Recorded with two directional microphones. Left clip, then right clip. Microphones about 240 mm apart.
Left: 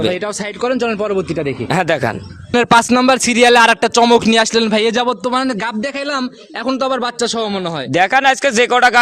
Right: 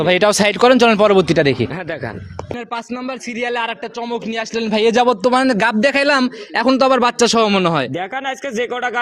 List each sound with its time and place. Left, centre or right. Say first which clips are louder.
0.1 s speech: right 7 dB; right
2.6 s speech: left 17 dB; left
4.9 s a man's voice: right 3 dB; centre; by 7.9 s right
7.9 s speech: left 11 dB; left